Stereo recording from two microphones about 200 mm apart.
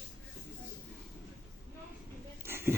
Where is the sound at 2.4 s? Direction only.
10° right (ahead or behind).